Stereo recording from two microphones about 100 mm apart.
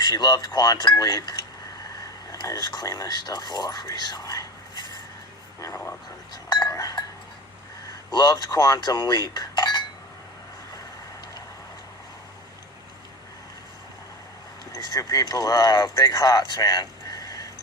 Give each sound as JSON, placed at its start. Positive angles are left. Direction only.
{"t": 0.0, "sound": "speech", "side_deg": 45}
{"t": 6.3, "sound": "chink", "side_deg": 45}
{"t": 8.1, "sound": "speech", "side_deg": 45}
{"t": 9.3, "sound": "chink", "side_deg": 45}
{"t": 14.8, "sound": "speech", "side_deg": 40}